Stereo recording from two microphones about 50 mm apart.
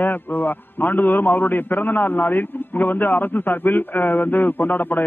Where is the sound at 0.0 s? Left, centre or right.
Left.